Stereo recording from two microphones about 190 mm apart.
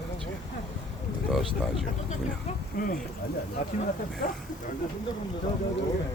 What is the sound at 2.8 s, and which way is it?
Speech, 50° left (ahead or behind).